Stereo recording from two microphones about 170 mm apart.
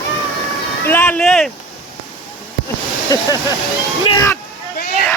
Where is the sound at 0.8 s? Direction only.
10° left (ahead or behind).